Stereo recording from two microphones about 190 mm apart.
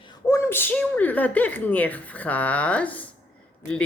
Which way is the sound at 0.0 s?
20° left (ahead or behind).